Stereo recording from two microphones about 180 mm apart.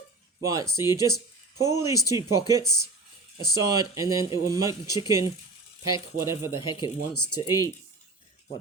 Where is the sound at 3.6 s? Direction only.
20° right (ahead or behind).